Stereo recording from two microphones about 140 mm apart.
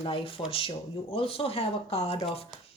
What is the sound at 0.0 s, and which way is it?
A woman's voice, 40° left (ahead or behind).